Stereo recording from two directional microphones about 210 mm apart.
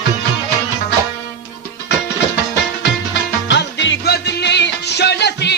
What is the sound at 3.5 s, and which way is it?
Music, 55° left (ahead or behind).